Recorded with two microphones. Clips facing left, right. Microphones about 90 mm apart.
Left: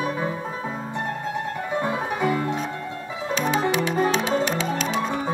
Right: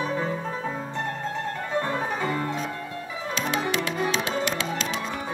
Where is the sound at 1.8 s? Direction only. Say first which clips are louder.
Left 2 dB; 10° left (ahead or behind).